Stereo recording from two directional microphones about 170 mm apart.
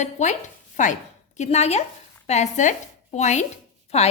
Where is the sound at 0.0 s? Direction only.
45° left (ahead or behind).